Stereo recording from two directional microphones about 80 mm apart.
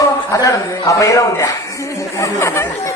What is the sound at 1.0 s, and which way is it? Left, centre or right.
Speech, left.